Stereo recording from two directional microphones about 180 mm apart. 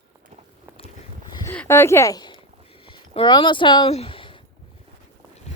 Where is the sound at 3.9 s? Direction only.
30° left (ahead or behind).